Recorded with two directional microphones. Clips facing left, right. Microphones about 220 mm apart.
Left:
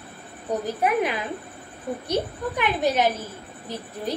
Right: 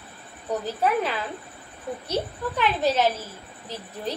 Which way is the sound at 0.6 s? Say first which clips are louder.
Left 1 dB; 15° left (ahead or behind).